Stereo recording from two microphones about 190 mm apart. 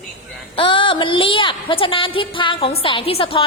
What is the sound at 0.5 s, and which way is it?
A woman's voice, 25° left (ahead or behind).